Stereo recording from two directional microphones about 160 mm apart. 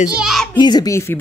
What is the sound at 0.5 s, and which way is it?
Speech, 25° left (ahead or behind).